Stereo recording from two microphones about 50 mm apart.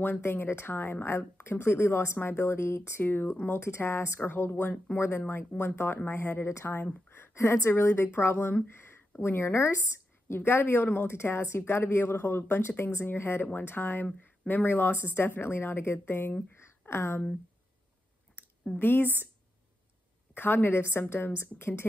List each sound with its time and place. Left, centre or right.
0.2 s speech: left
3.0 s speech: left
3.4 s speech: left
4.9 s speech: left
16.5 s a sound: left
18.8 s speech: left
20.3 s speech: left